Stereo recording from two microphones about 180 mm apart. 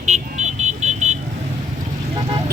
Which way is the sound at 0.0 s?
40° right (ahead or behind).